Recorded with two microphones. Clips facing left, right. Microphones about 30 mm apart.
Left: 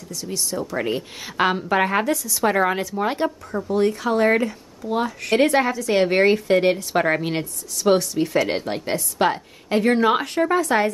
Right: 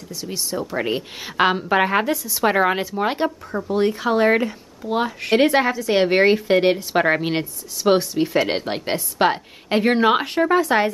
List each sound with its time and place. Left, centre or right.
0.1 s a woman's voice: right